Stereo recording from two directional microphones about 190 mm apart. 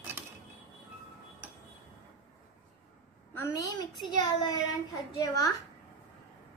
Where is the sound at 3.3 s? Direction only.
15° left (ahead or behind).